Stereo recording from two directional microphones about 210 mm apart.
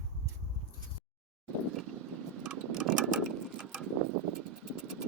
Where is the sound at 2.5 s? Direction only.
5° right (ahead or behind).